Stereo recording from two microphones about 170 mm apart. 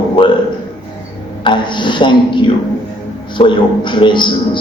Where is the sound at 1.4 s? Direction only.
25° left (ahead or behind).